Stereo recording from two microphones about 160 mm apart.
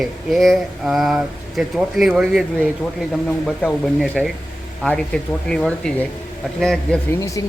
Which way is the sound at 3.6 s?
5° left (ahead or behind).